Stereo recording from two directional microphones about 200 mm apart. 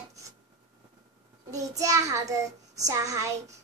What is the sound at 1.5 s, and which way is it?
A child's voice, 15° right (ahead or behind).